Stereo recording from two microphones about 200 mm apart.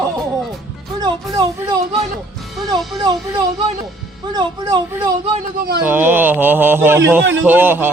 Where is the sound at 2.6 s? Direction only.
20° right (ahead or behind).